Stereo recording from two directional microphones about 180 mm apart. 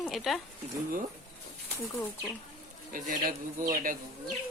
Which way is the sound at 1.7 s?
10° left (ahead or behind).